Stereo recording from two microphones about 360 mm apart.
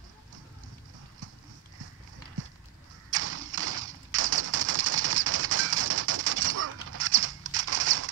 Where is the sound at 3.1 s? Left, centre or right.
Right.